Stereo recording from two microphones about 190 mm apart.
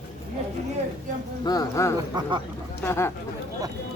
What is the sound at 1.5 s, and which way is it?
A man's voice, 15° left (ahead or behind).